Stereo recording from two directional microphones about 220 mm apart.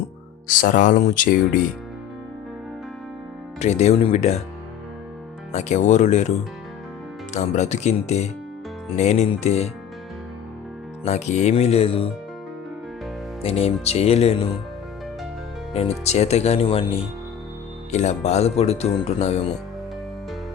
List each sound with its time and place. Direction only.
0.4 s speech: 35° left (ahead or behind)
3.6 s speech: 30° left (ahead or behind)
5.5 s speech: 30° left (ahead or behind)
7.3 s speech: 30° left (ahead or behind)
11.0 s speech: 30° left (ahead or behind)
13.4 s speech: 25° left (ahead or behind)
15.7 s speech: 30° left (ahead or behind)